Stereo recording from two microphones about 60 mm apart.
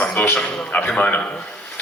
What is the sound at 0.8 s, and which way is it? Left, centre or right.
Speech, left.